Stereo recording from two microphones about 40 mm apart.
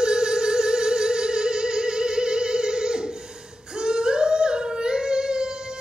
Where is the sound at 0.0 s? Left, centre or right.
Centre.